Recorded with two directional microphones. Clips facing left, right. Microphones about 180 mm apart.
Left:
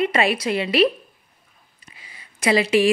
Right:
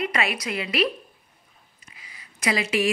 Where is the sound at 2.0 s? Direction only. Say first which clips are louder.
Left 5 dB; 30° left (ahead or behind).